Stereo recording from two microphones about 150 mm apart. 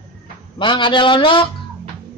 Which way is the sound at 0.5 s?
35° left (ahead or behind).